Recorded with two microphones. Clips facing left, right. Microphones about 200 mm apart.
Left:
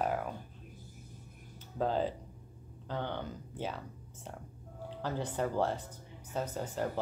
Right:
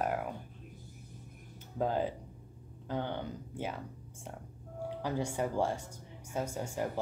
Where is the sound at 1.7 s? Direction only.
10° right (ahead or behind).